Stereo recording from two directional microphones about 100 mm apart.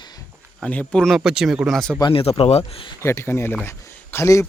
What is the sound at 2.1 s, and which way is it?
Speech, 70° left (ahead or behind).